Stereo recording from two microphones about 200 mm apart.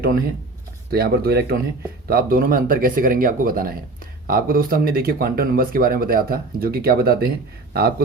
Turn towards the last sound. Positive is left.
turn(degrees=-50)  # may be behind; listen again after turning